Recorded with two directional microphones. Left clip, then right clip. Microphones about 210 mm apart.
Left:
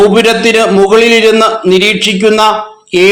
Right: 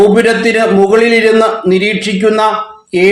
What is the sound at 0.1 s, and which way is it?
Speech, 20° left (ahead or behind).